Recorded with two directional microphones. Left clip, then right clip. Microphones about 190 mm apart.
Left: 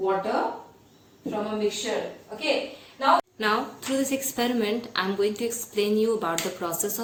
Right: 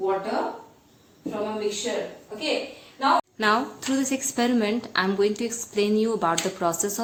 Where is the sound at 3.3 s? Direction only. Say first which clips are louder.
Right 3 dB; 55° right (ahead or behind).